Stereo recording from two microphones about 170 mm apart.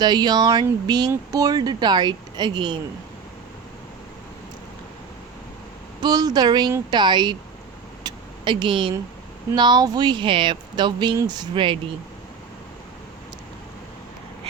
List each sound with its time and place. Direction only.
0.0 s speech: 25° right (ahead or behind)
6.0 s speech: 25° right (ahead or behind)
8.0 s vehicle: 25° right (ahead or behind)
9.6 s speech: 25° right (ahead or behind)